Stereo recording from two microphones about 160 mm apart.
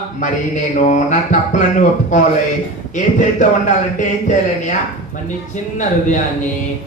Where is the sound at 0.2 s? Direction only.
50° left (ahead or behind).